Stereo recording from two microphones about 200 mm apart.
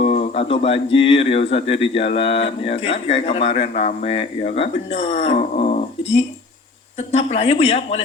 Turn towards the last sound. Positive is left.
turn(degrees=30)  # may be behind; listen again after turning